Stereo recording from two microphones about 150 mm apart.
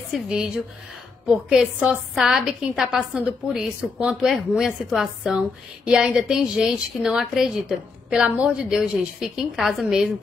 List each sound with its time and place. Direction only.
0.1 s a woman's voice: 5° right (ahead or behind)